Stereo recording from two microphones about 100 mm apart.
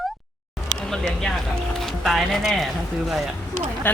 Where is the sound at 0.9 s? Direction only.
5° left (ahead or behind).